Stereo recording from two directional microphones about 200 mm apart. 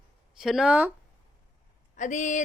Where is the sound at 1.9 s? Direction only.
40° left (ahead or behind).